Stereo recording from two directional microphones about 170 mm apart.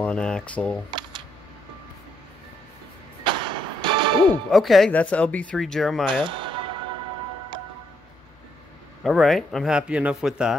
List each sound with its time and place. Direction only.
0.0 s speech: 5° left (ahead or behind)
0.8 s camera: 25° right (ahead or behind)
3.3 s music: 30° right (ahead or behind)
4.3 s speech: centre (ahead or behind)
6.2 s music: 30° right (ahead or behind)
9.0 s speech: centre (ahead or behind)